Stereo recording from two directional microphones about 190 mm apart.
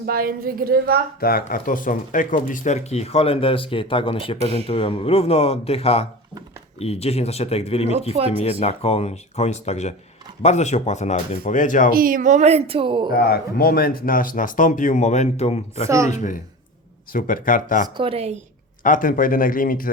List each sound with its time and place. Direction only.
0.0 s a woman's voice: 50° right (ahead or behind)
1.2 s speech: 50° left (ahead or behind); by 4.4 s 30° left (ahead or behind)
4.4 s speech: 30° right (ahead or behind)
4.7 s speech: 25° left (ahead or behind); by 11.9 s 45° left (ahead or behind)
11.9 s speech: 50° right (ahead or behind); by 13.1 s 25° right (ahead or behind)
13.1 s speech: 55° left (ahead or behind)
17.8 s speech: 25° right (ahead or behind)
18.8 s speech: 45° left (ahead or behind)